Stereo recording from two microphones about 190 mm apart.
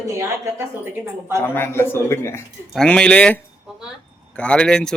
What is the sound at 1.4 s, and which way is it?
Speech, 10° left (ahead or behind).